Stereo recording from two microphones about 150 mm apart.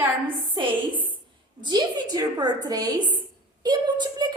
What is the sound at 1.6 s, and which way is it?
A woman's voice, 30° right (ahead or behind).